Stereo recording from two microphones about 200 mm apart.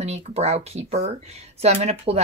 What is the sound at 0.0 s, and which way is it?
Speech, 30° right (ahead or behind).